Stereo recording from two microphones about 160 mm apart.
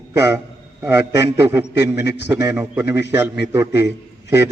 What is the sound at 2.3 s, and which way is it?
A man's voice, 15° right (ahead or behind).